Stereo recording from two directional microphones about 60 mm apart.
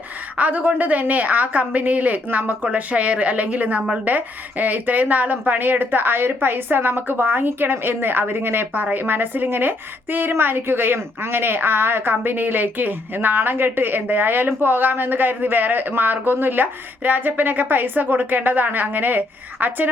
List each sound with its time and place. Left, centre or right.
0.3 s a woman's voice: right